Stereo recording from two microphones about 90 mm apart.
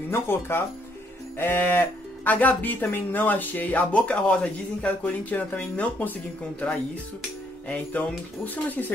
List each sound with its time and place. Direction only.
0.1 s speech: 25° left (ahead or behind)
7.6 s speech: 15° left (ahead or behind)